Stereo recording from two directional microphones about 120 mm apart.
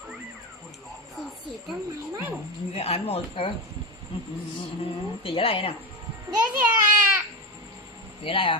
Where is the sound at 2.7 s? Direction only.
55° left (ahead or behind).